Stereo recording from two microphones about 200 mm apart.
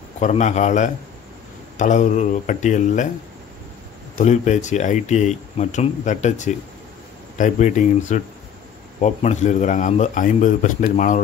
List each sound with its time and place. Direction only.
0.2 s speech: 35° left (ahead or behind)
4.2 s speech: 35° left (ahead or behind)